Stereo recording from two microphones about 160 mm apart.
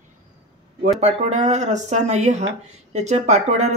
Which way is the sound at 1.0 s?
45° right (ahead or behind).